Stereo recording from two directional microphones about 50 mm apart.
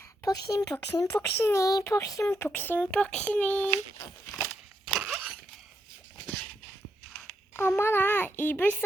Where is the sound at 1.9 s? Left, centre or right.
Left.